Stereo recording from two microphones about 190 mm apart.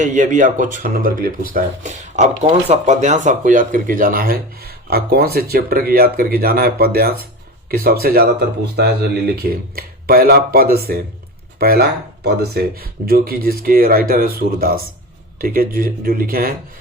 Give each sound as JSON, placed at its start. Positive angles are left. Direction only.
{"t": 0.0, "sound": "speech", "side_deg": -40}